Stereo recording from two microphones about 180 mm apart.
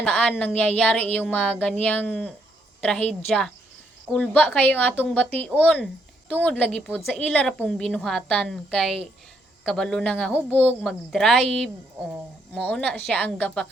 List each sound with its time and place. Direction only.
0.0 s a woman's voice: 5° left (ahead or behind)